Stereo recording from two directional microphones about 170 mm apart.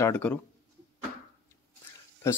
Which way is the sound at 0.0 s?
10° left (ahead or behind).